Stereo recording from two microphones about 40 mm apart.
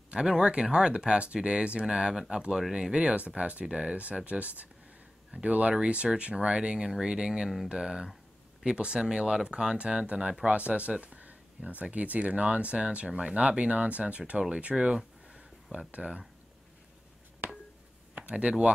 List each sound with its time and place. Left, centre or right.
0.1 s speech: right
3.0 s speech: right
3.6 s speech: right
3.9 s speech: right; by 9.8 s centre
10.0 s speech: right
15.2 s a sound: right
15.9 s speech: right
18.3 s speech: right